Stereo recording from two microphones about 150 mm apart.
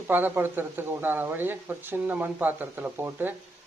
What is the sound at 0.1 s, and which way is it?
A man's voice, 10° right (ahead or behind).